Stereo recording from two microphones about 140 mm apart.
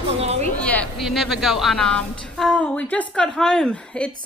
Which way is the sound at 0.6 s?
10° left (ahead or behind).